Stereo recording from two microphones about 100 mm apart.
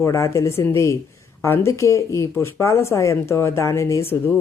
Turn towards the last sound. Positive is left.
turn(degrees=25)  # may be behind; listen again after turning